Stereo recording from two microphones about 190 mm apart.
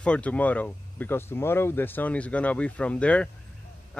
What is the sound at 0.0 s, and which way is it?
A man's voice, 5° left (ahead or behind).